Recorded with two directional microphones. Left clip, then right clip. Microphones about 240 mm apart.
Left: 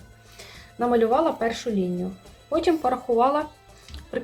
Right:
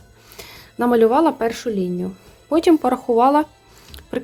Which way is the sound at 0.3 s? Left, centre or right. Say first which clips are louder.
Right 4 dB; right.